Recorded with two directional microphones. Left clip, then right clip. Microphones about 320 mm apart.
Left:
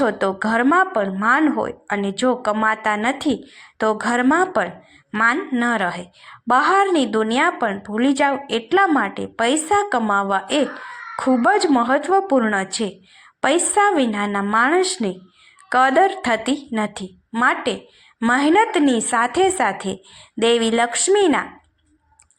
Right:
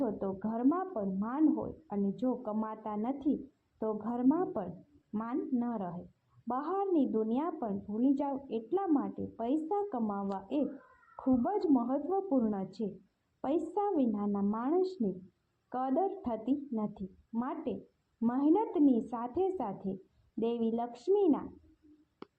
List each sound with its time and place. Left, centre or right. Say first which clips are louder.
0.0 s a woman's voice: left 16 dB; left